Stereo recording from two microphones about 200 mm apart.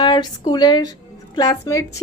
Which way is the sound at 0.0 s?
20° left (ahead or behind).